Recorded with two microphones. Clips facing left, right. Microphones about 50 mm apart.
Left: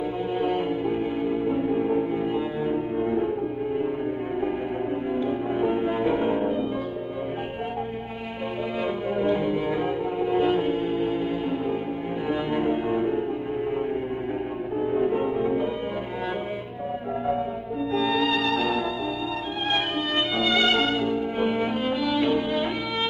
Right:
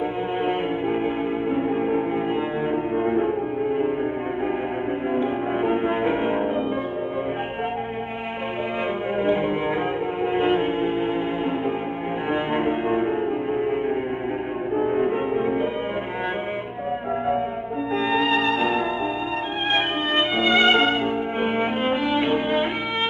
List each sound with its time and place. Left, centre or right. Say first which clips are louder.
0.4 s music: right 1 dB; right
5.1 s music: right 3 dB; right
9.1 s music: right 2 dB; right
12.3 s cello: right 2 dB; right
14.8 s music: right 1 dB; right
17.9 s music: right 2 dB; right